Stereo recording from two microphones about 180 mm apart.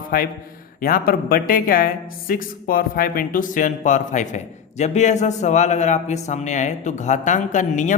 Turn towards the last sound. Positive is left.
turn(degrees=45)  # may be behind; listen again after turning